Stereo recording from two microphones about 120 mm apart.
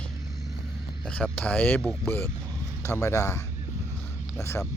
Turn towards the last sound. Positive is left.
turn(degrees=25)  # may be behind; listen again after turning